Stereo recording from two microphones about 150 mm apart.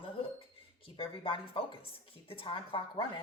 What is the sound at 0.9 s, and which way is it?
Speech, 35° left (ahead or behind).